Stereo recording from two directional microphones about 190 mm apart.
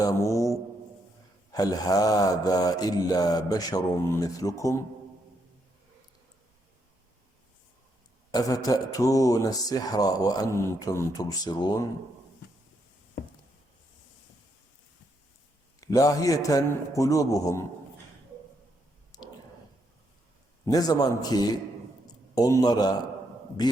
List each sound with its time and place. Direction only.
0.0 s a man's voice: 15° left (ahead or behind)
1.5 s a man's voice: 20° left (ahead or behind)
8.3 s a man's voice: 20° left (ahead or behind)
15.8 s a man's voice: 15° left (ahead or behind)
19.1 s a sound: 20° left (ahead or behind)
20.7 s a man's voice: 20° left (ahead or behind)